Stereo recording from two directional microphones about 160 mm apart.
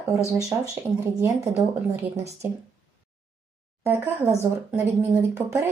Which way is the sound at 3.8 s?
15° right (ahead or behind).